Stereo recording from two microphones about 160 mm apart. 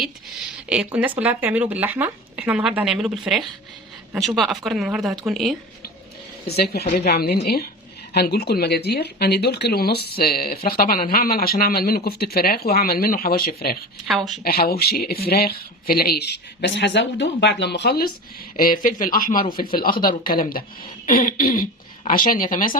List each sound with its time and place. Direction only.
0.9 s a woman's voice: 10° right (ahead or behind)
6.9 s speech: 85° left
8.1 s speech: 85° left; by 13.7 s 70° left (ahead or behind)
14.1 s a woman's voice: centre (ahead or behind)
14.4 s speech: 70° left (ahead or behind)
18.5 s speech: 65° left (ahead or behind)